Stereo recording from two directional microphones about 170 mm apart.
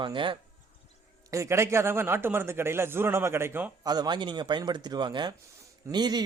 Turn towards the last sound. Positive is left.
turn(degrees=-25)  # may be behind; listen again after turning